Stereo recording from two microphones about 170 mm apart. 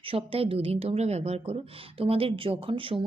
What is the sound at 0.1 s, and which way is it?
Speech, 35° right (ahead or behind).